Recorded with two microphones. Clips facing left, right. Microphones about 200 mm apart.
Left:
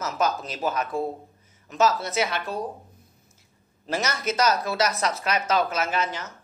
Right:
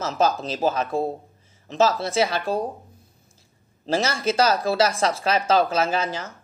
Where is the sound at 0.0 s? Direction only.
30° right (ahead or behind).